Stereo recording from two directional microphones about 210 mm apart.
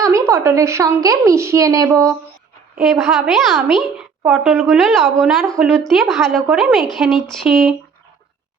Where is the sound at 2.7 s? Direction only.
Centre (ahead or behind).